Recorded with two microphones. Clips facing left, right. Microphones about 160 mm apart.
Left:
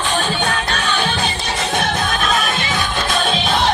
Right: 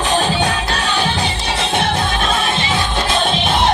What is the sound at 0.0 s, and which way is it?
Music, 35° right (ahead or behind).